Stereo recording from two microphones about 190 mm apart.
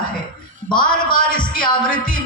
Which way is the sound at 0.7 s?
45° left (ahead or behind).